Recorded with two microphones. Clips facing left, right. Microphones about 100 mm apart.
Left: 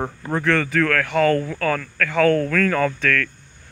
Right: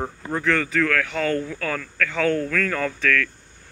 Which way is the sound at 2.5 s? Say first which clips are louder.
Left 5 dB; 55° left (ahead or behind).